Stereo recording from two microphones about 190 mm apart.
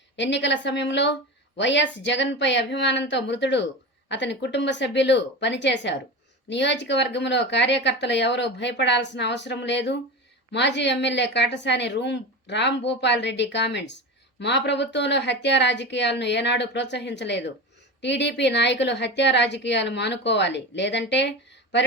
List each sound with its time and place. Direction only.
0.2 s speech: 70° left (ahead or behind)